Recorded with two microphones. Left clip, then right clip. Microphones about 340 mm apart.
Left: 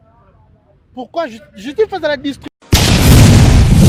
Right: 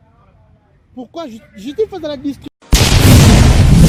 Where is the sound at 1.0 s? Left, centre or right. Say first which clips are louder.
Left 7 dB; left.